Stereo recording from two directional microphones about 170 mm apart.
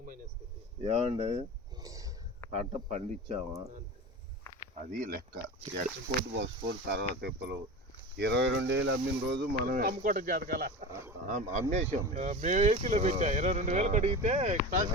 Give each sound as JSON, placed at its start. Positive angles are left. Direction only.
{"t": 0.8, "sound": "speech", "side_deg": -35}
{"t": 1.7, "sound": "a sound", "side_deg": -20}
{"t": 2.5, "sound": "speech", "side_deg": -40}
{"t": 4.9, "sound": "speech", "side_deg": -55}
{"t": 6.3, "sound": "speech", "side_deg": -90}
{"t": 11.3, "sound": "speech", "side_deg": -45}